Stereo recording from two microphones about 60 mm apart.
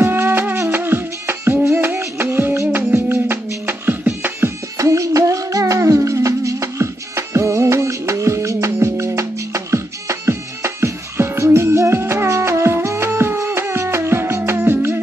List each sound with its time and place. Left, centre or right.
0.0 s music: right
4.7 s music: right